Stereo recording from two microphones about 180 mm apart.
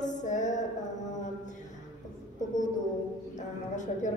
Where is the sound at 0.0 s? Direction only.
45° left (ahead or behind).